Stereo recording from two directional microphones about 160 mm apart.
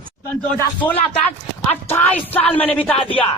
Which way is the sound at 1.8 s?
15° left (ahead or behind).